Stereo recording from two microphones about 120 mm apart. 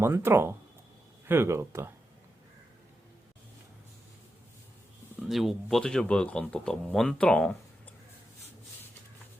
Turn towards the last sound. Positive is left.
turn(degrees=10)  # may be behind; listen again after turning